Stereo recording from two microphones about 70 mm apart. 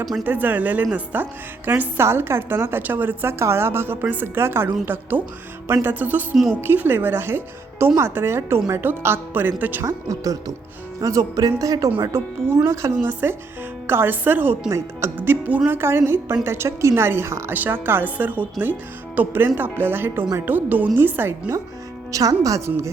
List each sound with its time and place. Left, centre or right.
0.3 s a woman's voice: right
6.3 s a woman's voice: centre
6.6 s a woman's voice: right
9.8 s a woman's voice: right
12.1 s a woman's voice: right
13.0 s a woman's voice: right
22.1 s speech: right